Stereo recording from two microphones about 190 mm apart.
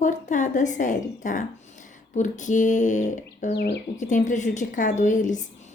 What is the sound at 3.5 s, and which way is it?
Speech, 65° left (ahead or behind).